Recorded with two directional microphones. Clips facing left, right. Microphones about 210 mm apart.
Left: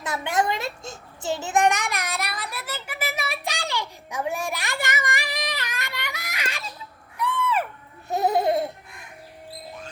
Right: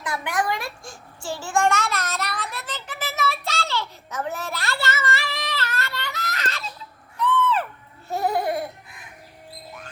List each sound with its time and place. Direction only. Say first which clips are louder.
0.0 s a sound: left 2 dB; 25° left (ahead or behind)
7.2 s owl: right 3 dB; 10° left (ahead or behind)
8.1 s baby laughter: left 2 dB; 20° left (ahead or behind)